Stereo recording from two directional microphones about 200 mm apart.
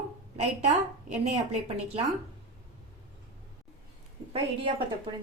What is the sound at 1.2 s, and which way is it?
Speech, 35° right (ahead or behind).